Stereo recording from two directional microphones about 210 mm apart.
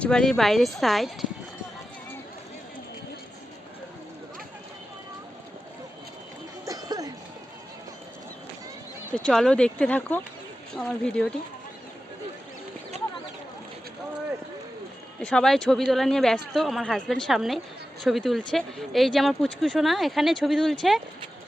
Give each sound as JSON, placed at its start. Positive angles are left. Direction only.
{"t": 0.0, "sound": "speech", "side_deg": 5}
{"t": 6.7, "sound": "a sound", "side_deg": -15}
{"t": 9.1, "sound": "speech", "side_deg": 5}
{"t": 15.2, "sound": "speech", "side_deg": 5}